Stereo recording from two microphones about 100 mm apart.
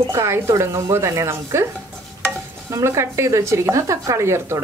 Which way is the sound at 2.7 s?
30° right (ahead or behind).